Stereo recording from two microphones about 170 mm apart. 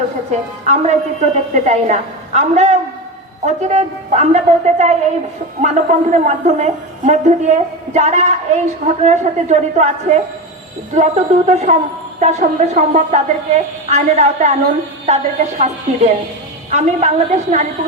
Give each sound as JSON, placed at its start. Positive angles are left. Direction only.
{"t": 0.3, "sound": "a woman's voice", "side_deg": -45}